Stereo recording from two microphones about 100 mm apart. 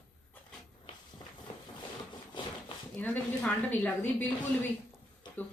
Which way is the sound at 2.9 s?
15° left (ahead or behind).